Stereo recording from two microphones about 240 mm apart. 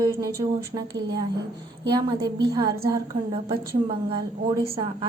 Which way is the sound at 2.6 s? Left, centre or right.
Right.